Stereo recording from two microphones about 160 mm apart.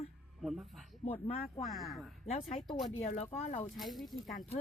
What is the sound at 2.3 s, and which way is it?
Speech, 40° left (ahead or behind).